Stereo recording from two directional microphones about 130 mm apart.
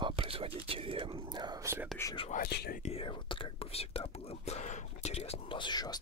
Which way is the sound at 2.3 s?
90° left.